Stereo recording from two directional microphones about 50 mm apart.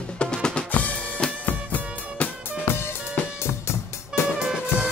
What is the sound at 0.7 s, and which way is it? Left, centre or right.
Drum kit, left.